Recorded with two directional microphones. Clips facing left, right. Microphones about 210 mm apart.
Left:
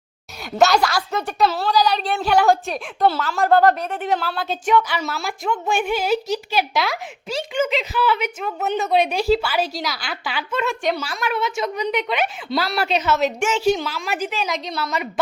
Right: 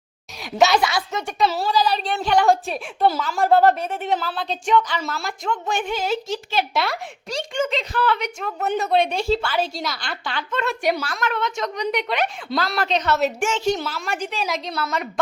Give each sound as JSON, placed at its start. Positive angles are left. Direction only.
{"t": 0.6, "sound": "a woman's voice", "side_deg": 0}